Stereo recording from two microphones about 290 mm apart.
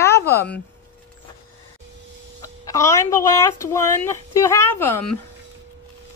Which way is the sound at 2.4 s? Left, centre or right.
Centre.